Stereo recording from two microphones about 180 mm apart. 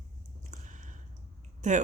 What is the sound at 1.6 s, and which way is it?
Speech, 45° right (ahead or behind).